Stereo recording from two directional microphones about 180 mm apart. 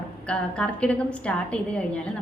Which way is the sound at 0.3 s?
5° left (ahead or behind).